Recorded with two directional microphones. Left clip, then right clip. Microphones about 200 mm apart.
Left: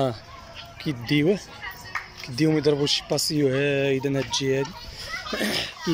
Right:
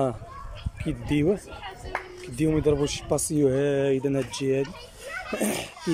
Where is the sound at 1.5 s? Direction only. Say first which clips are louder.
Left 1 dB; 55° right (ahead or behind).